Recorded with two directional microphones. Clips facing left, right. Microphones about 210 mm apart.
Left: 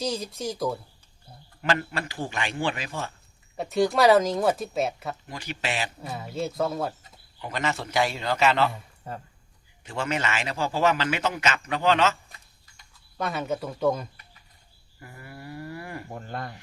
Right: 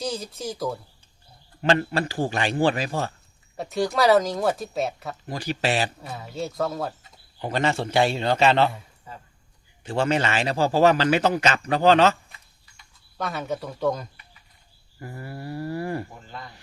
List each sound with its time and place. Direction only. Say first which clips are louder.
0.0 s speech: left 1 dB; centre (ahead or behind)
1.6 s a man's voice: right 5 dB; 30° right (ahead or behind)
3.6 s speech: left 1 dB; centre (ahead or behind)
5.3 s a man's voice: right 9 dB; 35° right (ahead or behind)
6.0 s speech: left 1 dB; centre (ahead or behind)
7.4 s a man's voice: right 5 dB; 30° right (ahead or behind)
9.8 s a man's voice: right 6 dB; 30° right (ahead or behind)
13.1 s speech: even; centre (ahead or behind)
15.0 s a man's voice: right 7 dB; 35° right (ahead or behind)
16.1 s speech: left 5 dB; 55° left (ahead or behind)